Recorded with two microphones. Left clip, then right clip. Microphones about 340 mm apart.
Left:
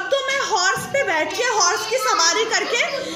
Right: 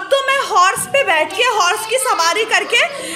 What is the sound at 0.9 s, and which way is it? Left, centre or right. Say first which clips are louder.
Speech: right 6 dB; right.